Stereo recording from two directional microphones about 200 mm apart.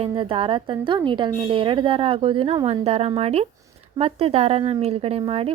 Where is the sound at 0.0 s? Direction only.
25° right (ahead or behind).